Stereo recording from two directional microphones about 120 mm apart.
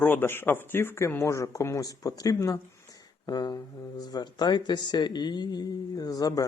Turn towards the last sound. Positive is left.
turn(degrees=30)  # may be behind; listen again after turning